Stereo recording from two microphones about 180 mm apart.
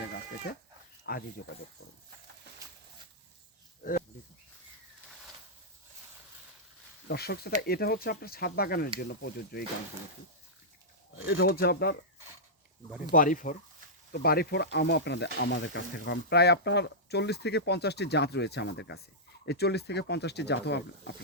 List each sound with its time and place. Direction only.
1.1 s speech: 60° left (ahead or behind)
7.1 s speech: 60° left (ahead or behind)
11.3 s speech: 60° left (ahead or behind)
13.1 s speech: 50° left (ahead or behind)
14.1 s speech: 60° left (ahead or behind)